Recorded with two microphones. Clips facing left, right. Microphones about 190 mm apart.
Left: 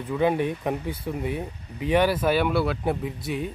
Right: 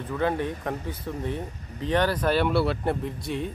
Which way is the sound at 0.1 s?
15° left (ahead or behind).